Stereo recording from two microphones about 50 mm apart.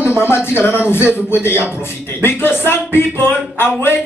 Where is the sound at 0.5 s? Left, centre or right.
Left.